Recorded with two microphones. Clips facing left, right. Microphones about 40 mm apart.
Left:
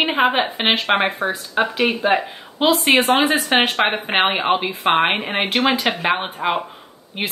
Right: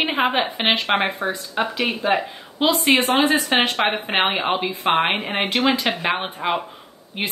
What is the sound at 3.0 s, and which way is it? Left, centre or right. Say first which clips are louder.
A woman's voice: left 1 dB; left.